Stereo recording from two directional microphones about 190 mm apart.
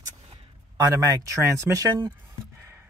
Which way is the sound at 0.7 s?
15° right (ahead or behind).